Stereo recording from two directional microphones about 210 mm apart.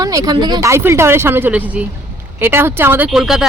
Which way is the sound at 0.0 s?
15° right (ahead or behind).